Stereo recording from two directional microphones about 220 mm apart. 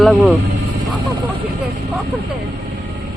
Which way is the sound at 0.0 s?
Centre (ahead or behind).